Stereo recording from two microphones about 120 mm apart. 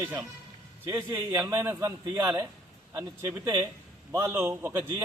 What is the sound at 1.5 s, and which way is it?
Speech, 25° right (ahead or behind).